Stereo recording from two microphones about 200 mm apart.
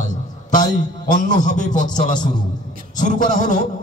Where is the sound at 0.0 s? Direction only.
40° left (ahead or behind).